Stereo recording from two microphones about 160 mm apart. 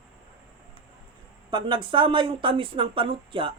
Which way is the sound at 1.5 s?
30° right (ahead or behind).